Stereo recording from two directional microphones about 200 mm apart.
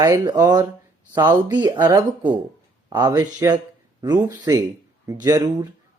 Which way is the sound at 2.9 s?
20° right (ahead or behind).